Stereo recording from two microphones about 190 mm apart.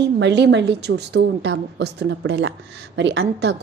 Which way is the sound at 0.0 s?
65° right (ahead or behind).